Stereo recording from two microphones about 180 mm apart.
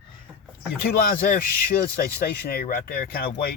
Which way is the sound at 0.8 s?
55° left (ahead or behind).